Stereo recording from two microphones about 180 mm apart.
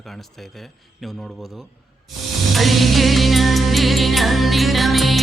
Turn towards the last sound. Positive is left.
turn(degrees=0)  # may be behind; listen again after turning